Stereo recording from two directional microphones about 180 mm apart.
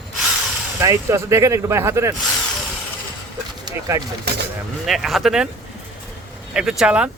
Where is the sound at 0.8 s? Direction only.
15° right (ahead or behind).